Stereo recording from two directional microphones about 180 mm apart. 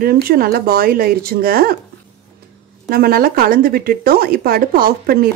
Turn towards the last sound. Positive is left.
turn(degrees=-55)  # may be behind; listen again after turning